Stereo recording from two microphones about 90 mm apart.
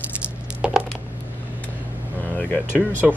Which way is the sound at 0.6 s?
10° right (ahead or behind).